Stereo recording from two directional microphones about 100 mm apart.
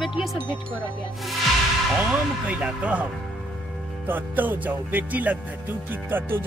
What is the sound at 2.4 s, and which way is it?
Speech, 15° right (ahead or behind).